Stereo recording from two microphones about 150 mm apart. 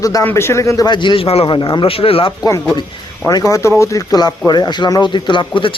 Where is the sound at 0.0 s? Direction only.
20° left (ahead or behind); by 2.3 s 40° left (ahead or behind).